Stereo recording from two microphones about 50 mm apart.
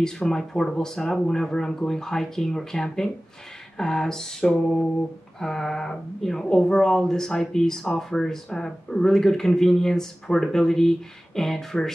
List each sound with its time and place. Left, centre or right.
0.0 s speech: centre